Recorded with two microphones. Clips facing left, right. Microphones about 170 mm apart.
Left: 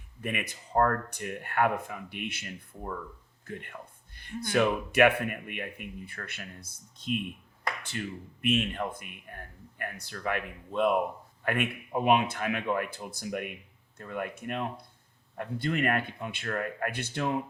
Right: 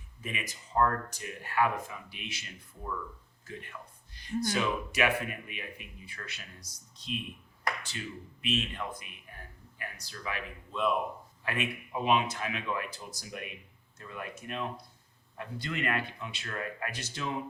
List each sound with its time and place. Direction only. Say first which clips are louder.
0.2 s speech: left 5 dB; 60° left (ahead or behind)